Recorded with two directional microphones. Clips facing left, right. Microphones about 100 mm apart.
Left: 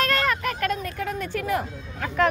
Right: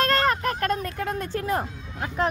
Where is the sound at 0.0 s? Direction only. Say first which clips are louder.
Right 2 dB; 30° right (ahead or behind).